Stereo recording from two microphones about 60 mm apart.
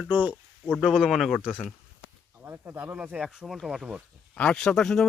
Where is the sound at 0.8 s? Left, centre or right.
Centre.